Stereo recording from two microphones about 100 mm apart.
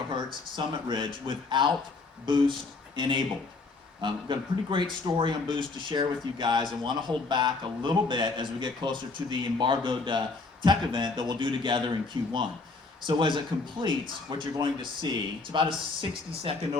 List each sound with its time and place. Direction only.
0.1 s speech: 50° right (ahead or behind)